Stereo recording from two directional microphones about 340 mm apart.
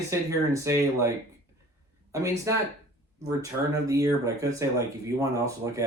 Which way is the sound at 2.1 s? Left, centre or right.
Centre.